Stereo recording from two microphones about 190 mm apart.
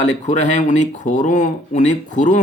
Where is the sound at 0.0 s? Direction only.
40° left (ahead or behind).